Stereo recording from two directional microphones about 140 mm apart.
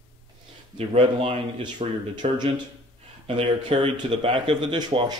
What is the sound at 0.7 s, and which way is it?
A man's voice, 45° right (ahead or behind).